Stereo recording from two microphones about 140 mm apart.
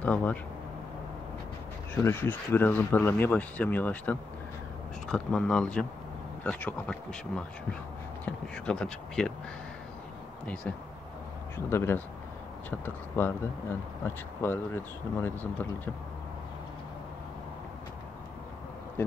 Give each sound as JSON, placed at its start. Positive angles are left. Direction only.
{"t": 0.0, "sound": "speech", "side_deg": 10}
{"t": 2.0, "sound": "speech", "side_deg": 15}
{"t": 10.4, "sound": "speech", "side_deg": 10}
{"t": 19.0, "sound": "speech", "side_deg": 15}